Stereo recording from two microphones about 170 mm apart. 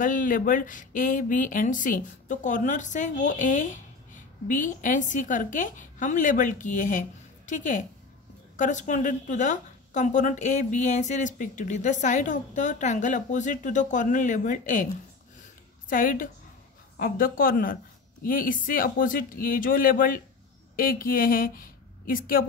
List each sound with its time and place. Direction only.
0.0 s speech: 50° left (ahead or behind)
15.9 s speech: 55° left (ahead or behind)